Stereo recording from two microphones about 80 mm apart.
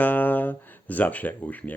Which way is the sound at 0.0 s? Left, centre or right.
Left.